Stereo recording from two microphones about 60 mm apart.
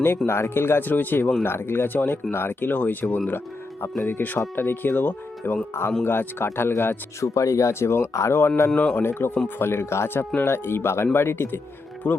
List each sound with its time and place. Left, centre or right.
0.3 s speech: left
7.3 s speech: left
8.7 s speech: centre
9.0 s speech: left